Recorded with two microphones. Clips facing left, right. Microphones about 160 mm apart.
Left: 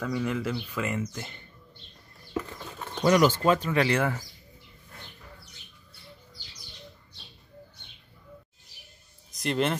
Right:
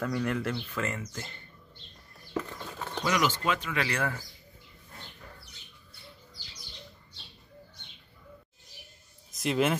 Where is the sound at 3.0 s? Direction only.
45° left (ahead or behind); by 4.2 s 25° left (ahead or behind).